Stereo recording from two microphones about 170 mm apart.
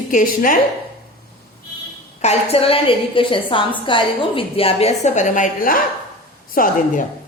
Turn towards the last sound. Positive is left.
turn(degrees=55)  # may be behind; listen again after turning